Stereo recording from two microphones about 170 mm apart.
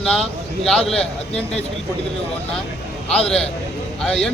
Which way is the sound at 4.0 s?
5° left (ahead or behind).